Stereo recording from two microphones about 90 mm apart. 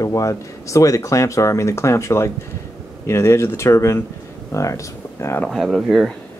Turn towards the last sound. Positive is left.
turn(degrees=0)  # may be behind; listen again after turning